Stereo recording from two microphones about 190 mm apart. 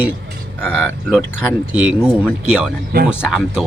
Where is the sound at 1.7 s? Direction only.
5° right (ahead or behind).